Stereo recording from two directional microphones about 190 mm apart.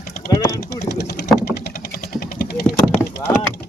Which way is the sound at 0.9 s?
55° left (ahead or behind).